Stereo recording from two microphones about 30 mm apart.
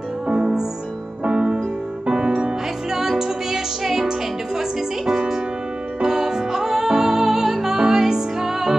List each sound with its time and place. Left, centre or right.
0.3 s music: right
2.0 s music: right
2.9 s music: centre
3.8 s music: centre
4.6 s music: centre